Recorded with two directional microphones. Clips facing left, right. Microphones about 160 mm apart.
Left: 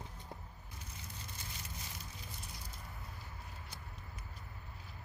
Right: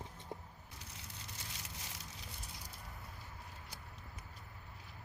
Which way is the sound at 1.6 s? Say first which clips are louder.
Left 2 dB; 90° right.